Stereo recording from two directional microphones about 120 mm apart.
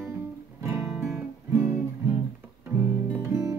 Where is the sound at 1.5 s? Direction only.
25° right (ahead or behind).